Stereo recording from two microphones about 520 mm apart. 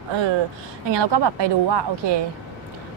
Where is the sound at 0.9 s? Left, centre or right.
Right.